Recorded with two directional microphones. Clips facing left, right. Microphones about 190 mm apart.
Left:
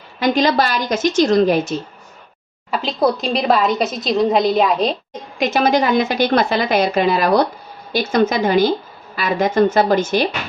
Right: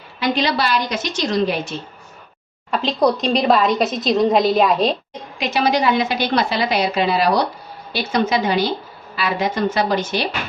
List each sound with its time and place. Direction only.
0.2 s a woman's voice: 45° left (ahead or behind)
2.6 s a woman's voice: 5° left (ahead or behind)
5.4 s a woman's voice: 50° left (ahead or behind)